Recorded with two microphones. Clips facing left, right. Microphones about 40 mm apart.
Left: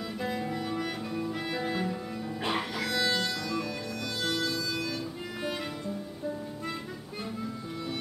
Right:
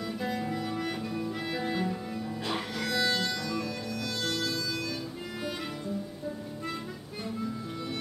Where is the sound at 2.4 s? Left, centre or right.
Centre.